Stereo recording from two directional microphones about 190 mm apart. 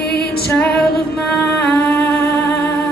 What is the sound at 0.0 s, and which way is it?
Music, 60° left (ahead or behind).